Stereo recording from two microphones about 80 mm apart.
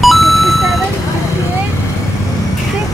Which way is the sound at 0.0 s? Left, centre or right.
Centre.